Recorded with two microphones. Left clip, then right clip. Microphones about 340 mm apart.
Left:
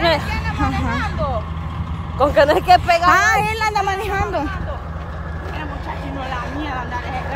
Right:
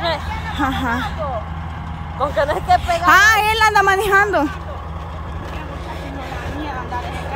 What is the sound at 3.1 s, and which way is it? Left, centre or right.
Speech, centre.